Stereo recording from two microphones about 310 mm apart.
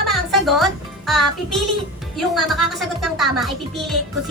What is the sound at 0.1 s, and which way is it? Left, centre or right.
Music, centre.